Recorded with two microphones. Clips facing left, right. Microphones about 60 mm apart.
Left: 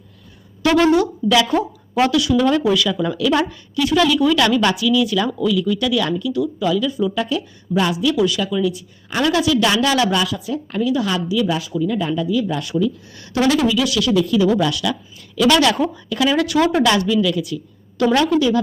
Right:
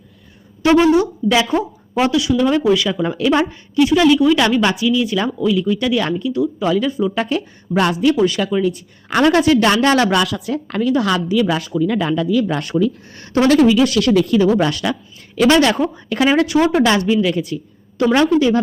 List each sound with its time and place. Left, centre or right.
0.6 s a woman's voice: right
8.1 s a woman's voice: right
12.8 s a woman's voice: right
14.4 s speech: right
15.4 s a woman's voice: right